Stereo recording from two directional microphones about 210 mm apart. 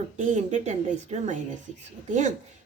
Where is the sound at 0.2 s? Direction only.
35° right (ahead or behind).